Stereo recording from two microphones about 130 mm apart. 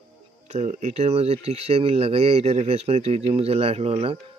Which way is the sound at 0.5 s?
70° right (ahead or behind).